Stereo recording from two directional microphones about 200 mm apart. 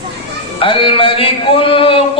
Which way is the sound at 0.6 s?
25° left (ahead or behind).